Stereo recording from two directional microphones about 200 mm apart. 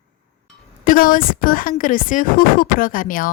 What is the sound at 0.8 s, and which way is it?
A woman's voice, 45° left (ahead or behind).